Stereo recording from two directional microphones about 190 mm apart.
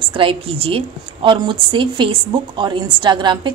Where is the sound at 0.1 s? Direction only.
30° right (ahead or behind).